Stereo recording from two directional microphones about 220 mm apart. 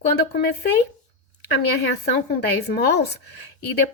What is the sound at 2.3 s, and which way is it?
Speech, 50° left (ahead or behind).